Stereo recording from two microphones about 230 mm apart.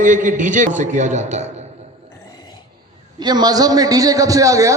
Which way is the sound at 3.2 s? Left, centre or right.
Centre.